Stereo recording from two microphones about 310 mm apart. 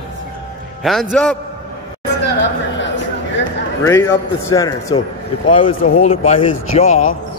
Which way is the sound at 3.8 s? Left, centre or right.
Centre.